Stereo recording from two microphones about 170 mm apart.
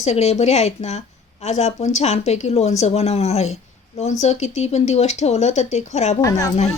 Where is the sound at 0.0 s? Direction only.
40° left (ahead or behind).